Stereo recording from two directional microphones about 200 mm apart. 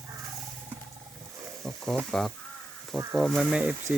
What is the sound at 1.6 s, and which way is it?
Sizzle, centre (ahead or behind).